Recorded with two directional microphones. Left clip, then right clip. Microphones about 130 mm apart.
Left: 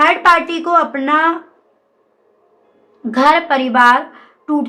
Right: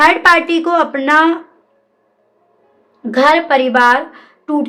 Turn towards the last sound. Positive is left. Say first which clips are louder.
# even
turn(degrees=-25)  # may be behind; listen again after turning